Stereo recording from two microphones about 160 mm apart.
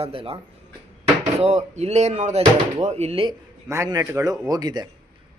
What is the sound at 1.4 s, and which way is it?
Speech, 45° right (ahead or behind).